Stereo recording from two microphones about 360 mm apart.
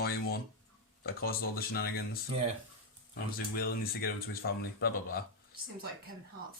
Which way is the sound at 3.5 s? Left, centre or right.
Left.